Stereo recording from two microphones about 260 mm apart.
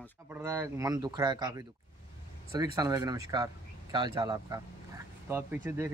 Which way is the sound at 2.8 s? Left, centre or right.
Centre.